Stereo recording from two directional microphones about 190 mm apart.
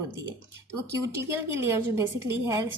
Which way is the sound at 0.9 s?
15° right (ahead or behind).